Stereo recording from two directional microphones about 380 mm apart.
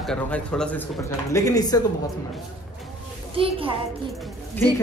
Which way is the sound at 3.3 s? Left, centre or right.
Centre.